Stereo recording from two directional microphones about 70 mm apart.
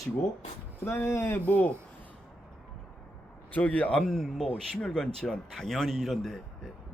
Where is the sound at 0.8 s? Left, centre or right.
Left.